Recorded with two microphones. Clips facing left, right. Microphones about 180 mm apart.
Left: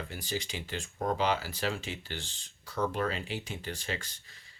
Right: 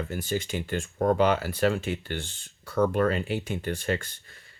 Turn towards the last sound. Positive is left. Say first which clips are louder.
# right 9 dB
turn(degrees=-55)  # may be behind; listen again after turning